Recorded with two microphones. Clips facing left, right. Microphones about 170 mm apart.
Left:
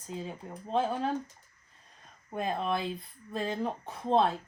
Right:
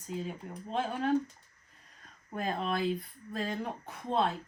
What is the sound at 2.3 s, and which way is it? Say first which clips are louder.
Speech: left 2 dB; 25° left (ahead or behind).